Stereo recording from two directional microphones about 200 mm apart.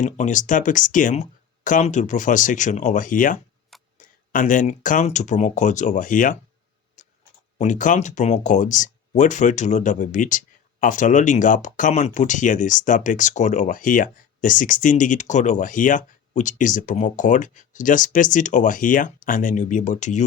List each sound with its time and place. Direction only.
0.0 s speech: 35° left (ahead or behind)
7.0 s a sound: 40° left (ahead or behind)
7.6 s speech: 40° left (ahead or behind)